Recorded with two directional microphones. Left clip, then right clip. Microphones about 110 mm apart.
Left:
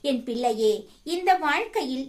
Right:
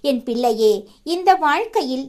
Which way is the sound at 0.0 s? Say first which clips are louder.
Right 6 dB; 60° right (ahead or behind).